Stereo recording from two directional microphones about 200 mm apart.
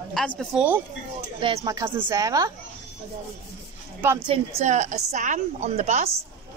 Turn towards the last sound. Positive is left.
turn(degrees=-35)  # may be behind; listen again after turning